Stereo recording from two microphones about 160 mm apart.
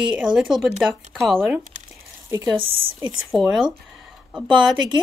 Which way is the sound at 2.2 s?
20° right (ahead or behind).